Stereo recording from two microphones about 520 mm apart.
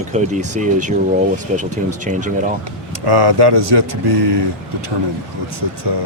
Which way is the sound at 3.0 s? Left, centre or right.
Right.